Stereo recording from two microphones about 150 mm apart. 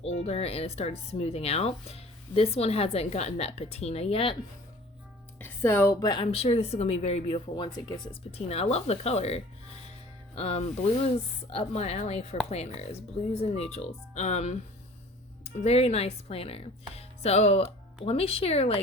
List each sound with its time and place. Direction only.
0.0 s speech: 45° left (ahead or behind)
5.4 s a woman's voice: 15° left (ahead or behind)
6.3 s speech: 45° left (ahead or behind)